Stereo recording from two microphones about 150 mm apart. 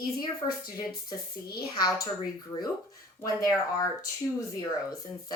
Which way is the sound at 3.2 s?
25° left (ahead or behind).